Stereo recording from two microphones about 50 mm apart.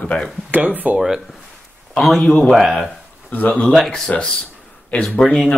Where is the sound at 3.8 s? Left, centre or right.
Centre.